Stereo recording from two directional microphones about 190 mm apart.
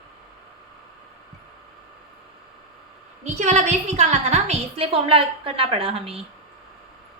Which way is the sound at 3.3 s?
40° right (ahead or behind).